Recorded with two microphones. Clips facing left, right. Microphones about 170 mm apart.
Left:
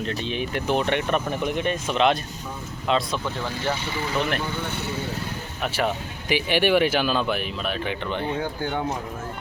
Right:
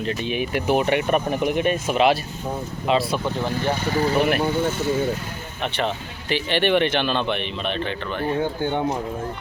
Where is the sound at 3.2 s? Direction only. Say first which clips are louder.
Right 4 dB; 20° right (ahead or behind).